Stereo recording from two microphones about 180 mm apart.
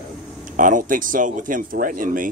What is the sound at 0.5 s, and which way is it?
Speech, 45° right (ahead or behind).